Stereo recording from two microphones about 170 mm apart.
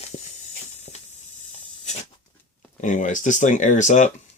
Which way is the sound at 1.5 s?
40° left (ahead or behind).